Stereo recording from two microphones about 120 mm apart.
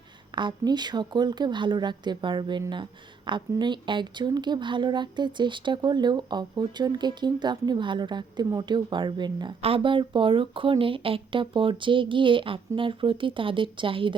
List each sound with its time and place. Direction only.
0.3 s speech: 40° right (ahead or behind)
9.6 s speech: 50° right (ahead or behind)